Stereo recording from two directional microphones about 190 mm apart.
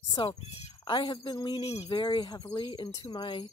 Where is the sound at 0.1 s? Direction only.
30° left (ahead or behind).